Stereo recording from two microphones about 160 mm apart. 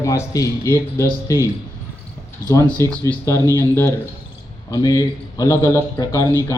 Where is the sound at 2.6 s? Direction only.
10° left (ahead or behind).